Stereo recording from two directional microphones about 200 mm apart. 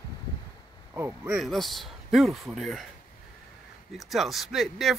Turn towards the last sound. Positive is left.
turn(degrees=0)  # may be behind; listen again after turning